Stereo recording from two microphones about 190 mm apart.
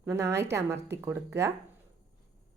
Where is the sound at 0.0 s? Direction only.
15° right (ahead or behind).